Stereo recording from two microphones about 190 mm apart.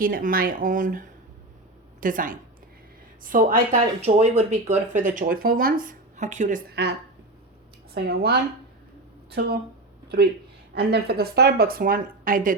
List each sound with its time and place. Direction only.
0.0 s speech: 50° right (ahead or behind)
7.9 s a woman's voice: 55° right (ahead or behind)
10.8 s speech: 60° right (ahead or behind)